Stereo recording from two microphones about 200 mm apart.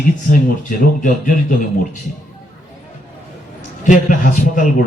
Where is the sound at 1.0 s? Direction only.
40° left (ahead or behind).